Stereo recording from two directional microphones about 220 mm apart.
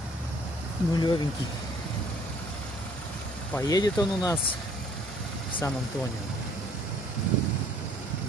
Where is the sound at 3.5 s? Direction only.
15° left (ahead or behind).